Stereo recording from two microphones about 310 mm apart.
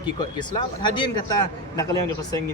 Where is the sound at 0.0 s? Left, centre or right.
Centre.